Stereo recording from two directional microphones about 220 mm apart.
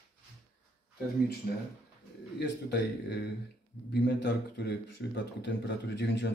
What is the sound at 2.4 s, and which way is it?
A man's voice, 50° left (ahead or behind).